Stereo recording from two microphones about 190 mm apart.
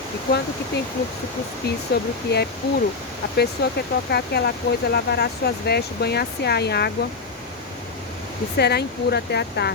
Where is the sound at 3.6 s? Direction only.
55° left (ahead or behind).